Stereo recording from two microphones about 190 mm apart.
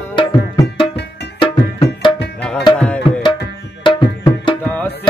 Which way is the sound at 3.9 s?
25° left (ahead or behind).